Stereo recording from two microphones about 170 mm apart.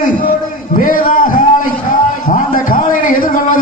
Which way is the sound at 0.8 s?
50° left (ahead or behind).